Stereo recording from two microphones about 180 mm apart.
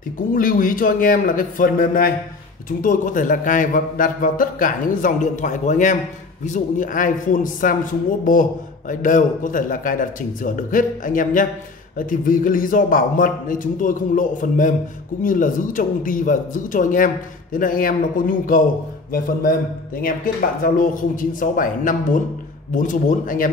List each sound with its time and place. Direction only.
0.3 s a man's voice: 50° left (ahead or behind)
20.6 s a man's voice: 50° left (ahead or behind)